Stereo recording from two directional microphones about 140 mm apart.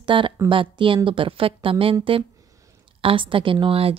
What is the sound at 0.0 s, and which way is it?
A woman's voice, 35° right (ahead or behind).